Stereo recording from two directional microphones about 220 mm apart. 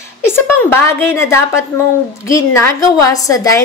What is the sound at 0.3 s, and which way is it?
Speech, 10° left (ahead or behind).